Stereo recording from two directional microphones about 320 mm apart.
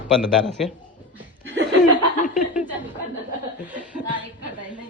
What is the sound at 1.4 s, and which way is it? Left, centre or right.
Chuckle, right.